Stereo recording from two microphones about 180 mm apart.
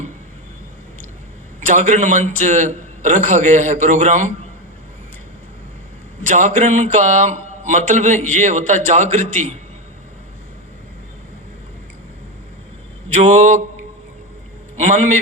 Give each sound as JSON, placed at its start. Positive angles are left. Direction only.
{"t": 1.6, "sound": "speech", "side_deg": -40}
{"t": 6.2, "sound": "speech", "side_deg": -40}
{"t": 13.1, "sound": "speech", "side_deg": -40}
{"t": 14.8, "sound": "speech", "side_deg": -40}